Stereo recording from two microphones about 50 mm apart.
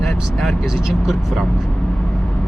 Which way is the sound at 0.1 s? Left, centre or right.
Centre.